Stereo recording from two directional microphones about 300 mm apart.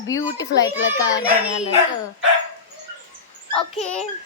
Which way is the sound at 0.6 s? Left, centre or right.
Left.